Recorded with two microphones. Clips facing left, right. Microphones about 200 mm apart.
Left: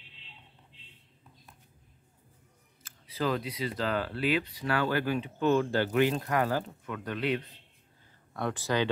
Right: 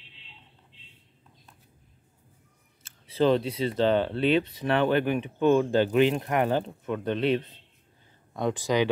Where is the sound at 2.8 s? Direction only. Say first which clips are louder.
Right 8 dB; 25° right (ahead or behind).